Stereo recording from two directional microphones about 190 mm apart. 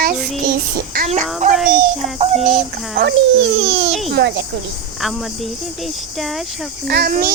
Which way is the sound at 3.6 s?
75° right (ahead or behind).